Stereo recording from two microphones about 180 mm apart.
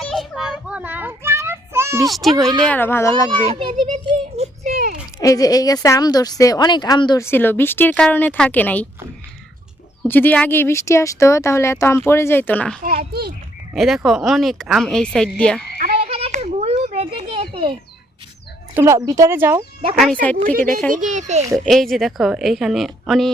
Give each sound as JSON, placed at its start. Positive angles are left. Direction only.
{"t": 0.1, "sound": "child singing", "side_deg": 0}
{"t": 2.0, "sound": "speech", "side_deg": 0}
{"t": 2.4, "sound": "speech", "side_deg": -20}
{"t": 2.6, "sound": "speech", "side_deg": 10}
{"t": 3.3, "sound": "a child's voice", "side_deg": -30}
{"t": 4.7, "sound": "a sound", "side_deg": -55}
{"t": 5.2, "sound": "speech", "side_deg": 20}
{"t": 7.3, "sound": "speech", "side_deg": 10}
{"t": 10.0, "sound": "speech", "side_deg": 10}
{"t": 16.0, "sound": "children playing", "side_deg": -35}
{"t": 18.7, "sound": "speech", "side_deg": -15}
{"t": 20.3, "sound": "a child's voice", "side_deg": -55}
{"t": 21.7, "sound": "speech", "side_deg": 0}